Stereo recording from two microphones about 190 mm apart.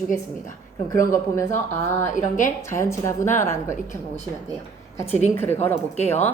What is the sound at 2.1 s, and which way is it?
Speech, 40° left (ahead or behind).